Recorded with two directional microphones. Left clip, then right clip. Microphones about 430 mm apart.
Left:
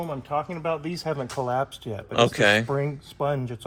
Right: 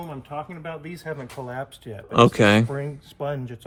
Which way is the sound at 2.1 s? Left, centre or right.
Centre.